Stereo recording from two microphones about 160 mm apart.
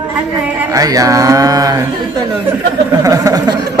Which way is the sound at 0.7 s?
20° right (ahead or behind).